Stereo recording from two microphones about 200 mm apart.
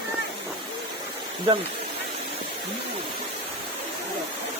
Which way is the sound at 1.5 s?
25° right (ahead or behind).